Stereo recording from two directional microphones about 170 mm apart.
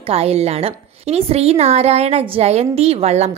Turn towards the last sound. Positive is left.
turn(degrees=-40)  # may be behind; listen again after turning